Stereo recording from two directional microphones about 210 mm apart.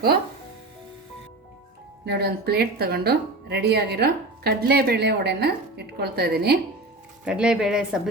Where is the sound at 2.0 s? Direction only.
50° right (ahead or behind).